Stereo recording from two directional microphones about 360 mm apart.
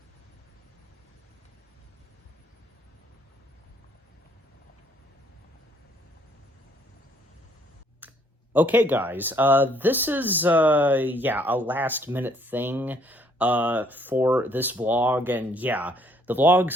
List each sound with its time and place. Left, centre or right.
8.0 s clicking: centre
8.5 s speech: centre